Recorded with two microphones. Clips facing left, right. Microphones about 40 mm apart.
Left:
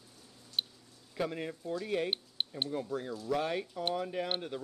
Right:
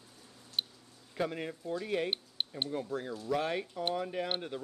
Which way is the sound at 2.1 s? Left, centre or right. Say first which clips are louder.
Even; centre.